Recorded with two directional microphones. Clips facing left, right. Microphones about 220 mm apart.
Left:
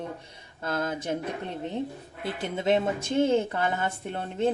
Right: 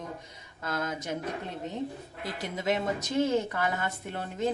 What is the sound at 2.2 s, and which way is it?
A woman's voice, 30° left (ahead or behind).